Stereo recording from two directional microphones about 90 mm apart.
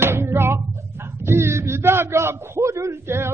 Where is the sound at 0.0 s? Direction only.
25° right (ahead or behind).